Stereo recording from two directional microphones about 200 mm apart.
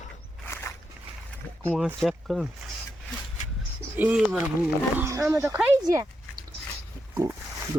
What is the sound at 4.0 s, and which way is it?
Speech, 5° right (ahead or behind).